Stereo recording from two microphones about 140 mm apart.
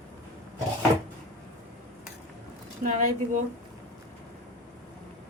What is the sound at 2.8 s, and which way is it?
Speech, 70° right (ahead or behind).